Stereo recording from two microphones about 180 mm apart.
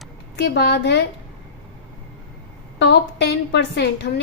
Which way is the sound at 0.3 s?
65° left (ahead or behind).